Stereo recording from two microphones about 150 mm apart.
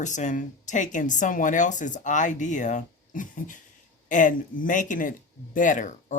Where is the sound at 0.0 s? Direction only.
55° left (ahead or behind).